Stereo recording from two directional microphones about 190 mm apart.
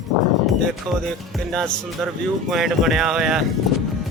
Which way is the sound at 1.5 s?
Centre (ahead or behind).